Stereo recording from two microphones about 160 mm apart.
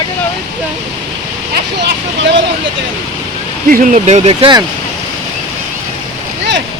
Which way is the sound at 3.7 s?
60° right (ahead or behind).